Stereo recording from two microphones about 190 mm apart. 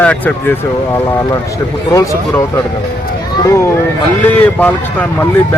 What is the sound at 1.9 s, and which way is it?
Speech, 15° left (ahead or behind).